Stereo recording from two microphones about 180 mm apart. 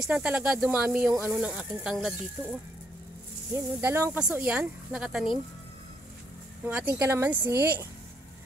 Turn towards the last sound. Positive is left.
turn(degrees=-15)  # may be behind; listen again after turning